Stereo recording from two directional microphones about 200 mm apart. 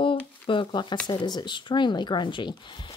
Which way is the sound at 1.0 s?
20° left (ahead or behind).